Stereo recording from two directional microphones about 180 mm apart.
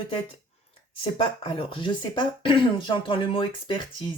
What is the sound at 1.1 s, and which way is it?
Speech, 30° left (ahead or behind).